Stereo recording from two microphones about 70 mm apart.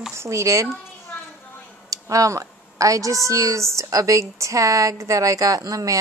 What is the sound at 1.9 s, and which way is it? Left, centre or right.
A woman's voice, right.